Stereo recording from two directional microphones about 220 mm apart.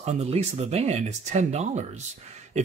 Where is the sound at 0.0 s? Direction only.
30° right (ahead or behind).